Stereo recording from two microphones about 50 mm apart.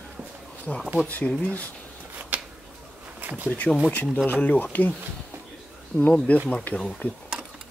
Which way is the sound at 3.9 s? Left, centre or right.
Left.